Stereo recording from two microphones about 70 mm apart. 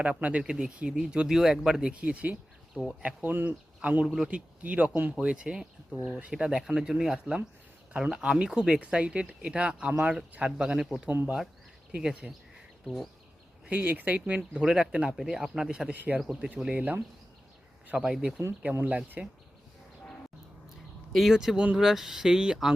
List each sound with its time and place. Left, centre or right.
0.0 s speech: centre
2.8 s speech: centre
3.2 s speech: right
4.0 s speech: centre
4.3 s speech: centre
11.1 s speech: right
11.9 s speech: centre
12.8 s speech: centre
13.7 s speech: right
16.0 s speech: right
17.9 s speech: centre
21.1 s speech: centre
21.8 s speech: centre